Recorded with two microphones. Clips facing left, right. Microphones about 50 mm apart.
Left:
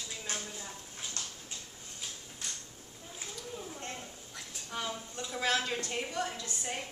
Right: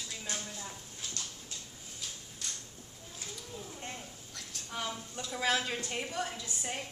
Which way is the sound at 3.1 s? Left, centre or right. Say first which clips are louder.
Left 2 dB; centre.